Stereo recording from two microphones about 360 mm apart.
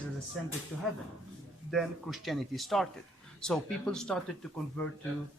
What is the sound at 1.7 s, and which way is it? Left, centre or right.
A man's voice, centre.